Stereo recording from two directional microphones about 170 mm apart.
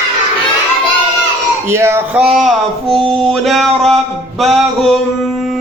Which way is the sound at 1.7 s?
15° right (ahead or behind).